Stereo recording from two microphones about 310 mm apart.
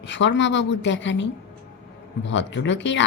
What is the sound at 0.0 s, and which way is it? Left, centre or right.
A woman's voice, left.